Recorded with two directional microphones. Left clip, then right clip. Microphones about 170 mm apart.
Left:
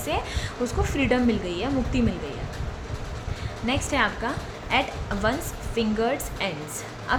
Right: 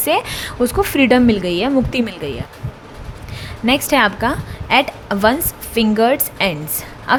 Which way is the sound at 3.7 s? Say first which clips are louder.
Right 10 dB; 55° right (ahead or behind).